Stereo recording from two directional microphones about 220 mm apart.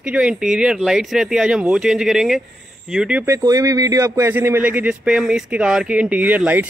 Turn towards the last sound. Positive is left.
turn(degrees=-5)  # may be behind; listen again after turning